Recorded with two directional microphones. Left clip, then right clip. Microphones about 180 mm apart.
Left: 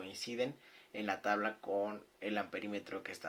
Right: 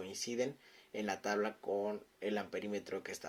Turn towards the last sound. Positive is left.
turn(degrees=-50)  # may be behind; listen again after turning